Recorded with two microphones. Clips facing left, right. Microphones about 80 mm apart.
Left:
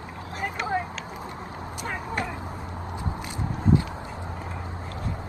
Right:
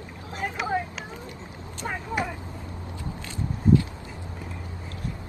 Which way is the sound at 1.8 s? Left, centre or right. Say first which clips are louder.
Right 2 dB; centre.